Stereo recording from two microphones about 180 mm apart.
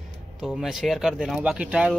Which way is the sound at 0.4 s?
Centre (ahead or behind).